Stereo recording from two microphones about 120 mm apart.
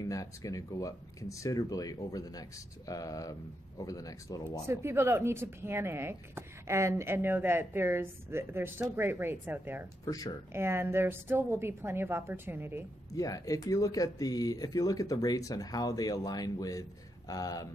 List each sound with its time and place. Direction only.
0.0 s speech: 30° left (ahead or behind)
4.6 s speech: 20° right (ahead or behind)
10.0 s speech: 30° left (ahead or behind)
10.5 s speech: 20° right (ahead or behind)
13.1 s speech: 30° left (ahead or behind)